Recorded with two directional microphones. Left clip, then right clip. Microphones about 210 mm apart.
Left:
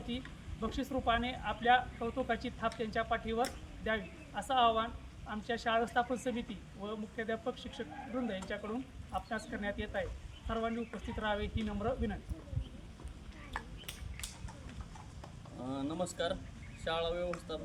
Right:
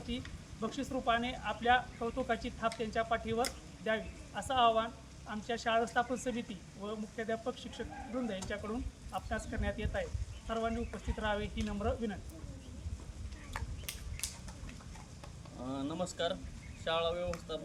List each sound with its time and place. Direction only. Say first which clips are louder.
0.1 s speech: even; 5° left (ahead or behind)
13.5 s stir: left 2 dB; 45° right (ahead or behind)
14.2 s a sound: right 4 dB; 50° right (ahead or behind)
15.6 s speech: even; 10° left (ahead or behind)